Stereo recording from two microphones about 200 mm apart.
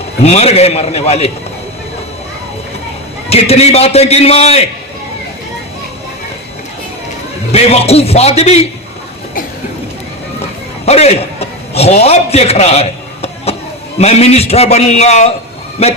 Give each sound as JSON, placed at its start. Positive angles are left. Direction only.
{"t": 0.2, "sound": "a man's voice", "side_deg": 30}
{"t": 3.2, "sound": "a man's voice", "side_deg": 30}
{"t": 7.5, "sound": "a man's voice", "side_deg": 30}
{"t": 10.8, "sound": "a man's voice", "side_deg": 30}